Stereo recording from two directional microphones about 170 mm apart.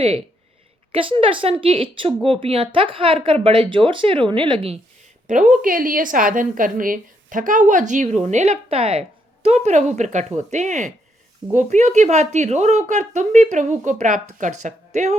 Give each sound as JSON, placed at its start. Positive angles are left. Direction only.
{"t": 0.9, "sound": "a woman's voice", "side_deg": -30}
{"t": 5.3, "sound": "a woman's voice", "side_deg": -50}